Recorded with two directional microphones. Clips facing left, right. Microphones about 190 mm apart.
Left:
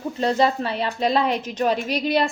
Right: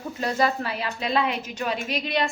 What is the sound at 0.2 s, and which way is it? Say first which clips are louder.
A woman's voice: left 4 dB; 30° left (ahead or behind).